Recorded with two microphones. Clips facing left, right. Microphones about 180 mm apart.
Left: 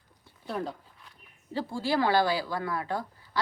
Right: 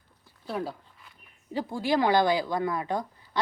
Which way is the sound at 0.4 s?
5° right (ahead or behind).